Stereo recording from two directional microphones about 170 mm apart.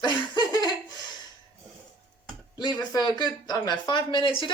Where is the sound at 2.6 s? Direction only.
25° left (ahead or behind).